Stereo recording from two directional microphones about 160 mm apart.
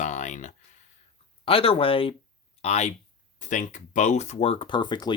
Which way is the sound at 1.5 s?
35° left (ahead or behind).